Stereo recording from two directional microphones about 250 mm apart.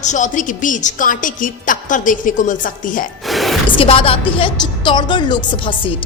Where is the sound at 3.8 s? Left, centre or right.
Left.